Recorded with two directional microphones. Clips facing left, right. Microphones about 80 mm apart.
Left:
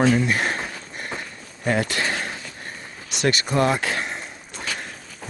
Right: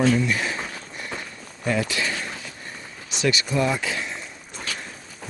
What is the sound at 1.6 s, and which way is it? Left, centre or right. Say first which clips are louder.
Speech: left 2 dB; left.